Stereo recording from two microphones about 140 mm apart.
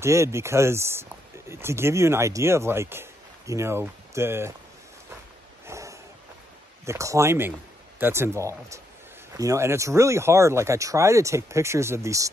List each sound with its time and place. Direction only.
0.0 s speech: 20° right (ahead or behind)
5.7 s a sound: 20° right (ahead or behind)
6.9 s speech: 20° right (ahead or behind)